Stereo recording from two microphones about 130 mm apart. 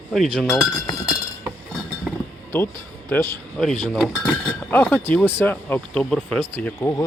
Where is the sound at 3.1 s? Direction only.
15° left (ahead or behind).